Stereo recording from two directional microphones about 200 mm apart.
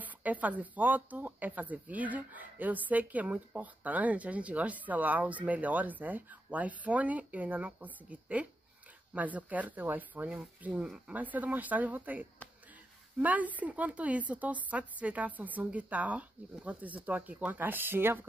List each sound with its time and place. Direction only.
0.0 s speech: 10° right (ahead or behind)